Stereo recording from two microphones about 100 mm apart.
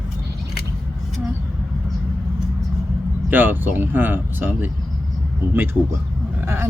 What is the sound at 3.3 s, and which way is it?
Speech, 20° right (ahead or behind).